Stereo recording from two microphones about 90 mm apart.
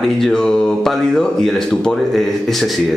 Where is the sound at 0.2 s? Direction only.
5° left (ahead or behind).